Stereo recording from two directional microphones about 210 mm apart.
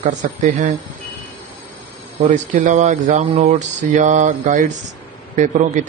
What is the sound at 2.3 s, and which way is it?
Speech, 35° right (ahead or behind).